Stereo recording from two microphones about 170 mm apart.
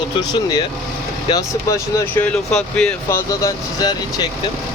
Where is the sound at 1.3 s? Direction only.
20° left (ahead or behind).